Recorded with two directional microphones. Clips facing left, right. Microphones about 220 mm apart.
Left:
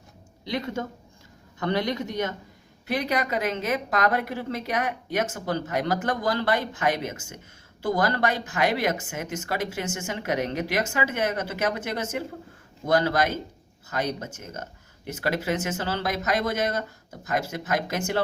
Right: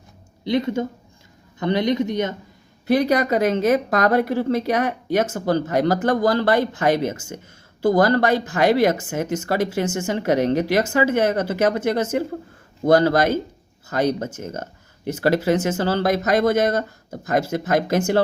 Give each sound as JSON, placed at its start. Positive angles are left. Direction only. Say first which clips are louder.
{"t": 0.4, "sound": "a man's voice", "louder": "right 8 dB", "side_deg": -25}
{"t": 2.8, "sound": "speech", "louder": "right 9 dB", "side_deg": -35}